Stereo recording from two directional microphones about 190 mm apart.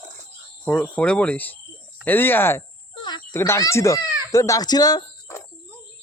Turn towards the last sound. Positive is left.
turn(degrees=15)  # may be behind; listen again after turning